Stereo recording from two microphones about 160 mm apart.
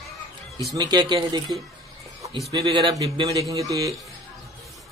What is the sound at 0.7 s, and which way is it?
Speech, 25° right (ahead or behind).